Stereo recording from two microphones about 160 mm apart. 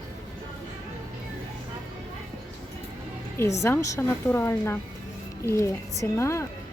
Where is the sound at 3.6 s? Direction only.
15° left (ahead or behind).